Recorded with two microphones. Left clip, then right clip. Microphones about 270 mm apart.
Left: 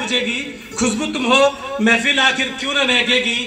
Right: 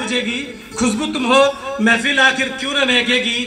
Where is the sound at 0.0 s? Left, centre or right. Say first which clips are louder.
Left 1 dB; right.